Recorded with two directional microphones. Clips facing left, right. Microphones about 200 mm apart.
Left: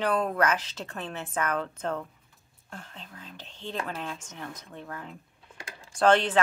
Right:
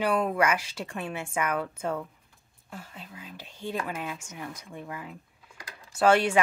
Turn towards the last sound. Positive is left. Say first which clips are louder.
# even
turn(degrees=-10)  # may be behind; listen again after turning